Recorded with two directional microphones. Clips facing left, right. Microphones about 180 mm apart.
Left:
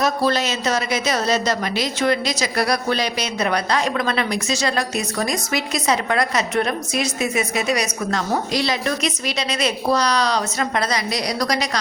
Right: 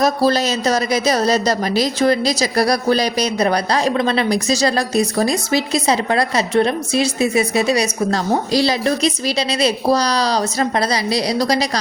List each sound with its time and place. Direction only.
0.0 s a woman's voice: 35° right (ahead or behind)